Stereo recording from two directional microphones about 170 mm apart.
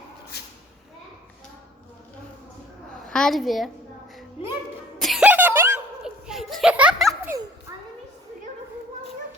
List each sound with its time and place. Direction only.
3.1 s a woman's voice: 5° left (ahead or behind)
4.9 s music: centre (ahead or behind)
6.2 s a sound: centre (ahead or behind)
7.1 s children playing: 20° right (ahead or behind)